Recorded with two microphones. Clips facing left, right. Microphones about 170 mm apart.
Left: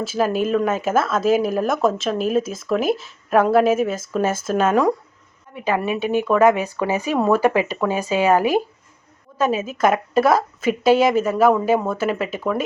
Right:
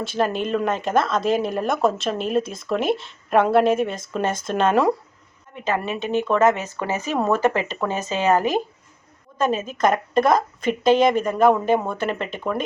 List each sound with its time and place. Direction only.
0.0 s a woman's voice: 5° left (ahead or behind)
5.6 s a woman's voice: 10° left (ahead or behind)